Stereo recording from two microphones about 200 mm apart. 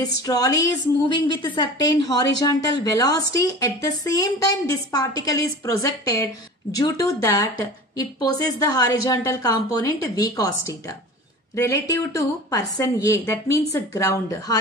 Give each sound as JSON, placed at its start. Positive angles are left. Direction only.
{"t": 0.0, "sound": "a woman's voice", "side_deg": 20}